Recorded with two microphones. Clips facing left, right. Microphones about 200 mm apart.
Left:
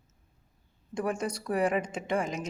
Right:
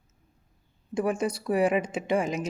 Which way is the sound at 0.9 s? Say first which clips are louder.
Right 4 dB; 5° right (ahead or behind).